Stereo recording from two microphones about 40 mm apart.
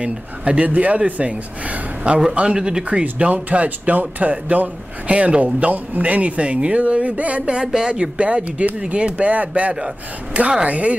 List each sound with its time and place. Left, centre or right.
0.0 s speech: right
2.0 s speech: right
3.0 s speech: right
7.5 s speech: right